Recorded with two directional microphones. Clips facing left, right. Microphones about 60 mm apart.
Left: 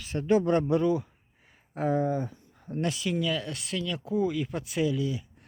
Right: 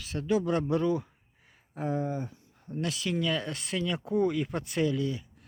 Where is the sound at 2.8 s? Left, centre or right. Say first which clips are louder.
Left 3 dB; left.